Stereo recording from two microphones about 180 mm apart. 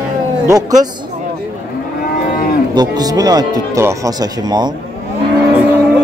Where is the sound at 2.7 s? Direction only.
20° right (ahead or behind).